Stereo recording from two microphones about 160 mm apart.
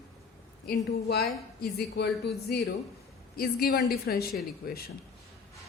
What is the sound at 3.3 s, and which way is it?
A woman's voice, 70° left (ahead or behind).